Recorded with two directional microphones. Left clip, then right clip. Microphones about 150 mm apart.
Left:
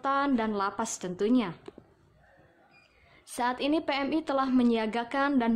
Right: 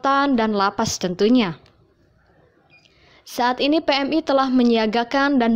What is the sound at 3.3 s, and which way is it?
A woman's voice, 35° right (ahead or behind).